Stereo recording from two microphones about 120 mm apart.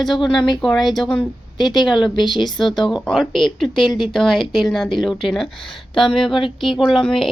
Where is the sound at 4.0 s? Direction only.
Centre (ahead or behind).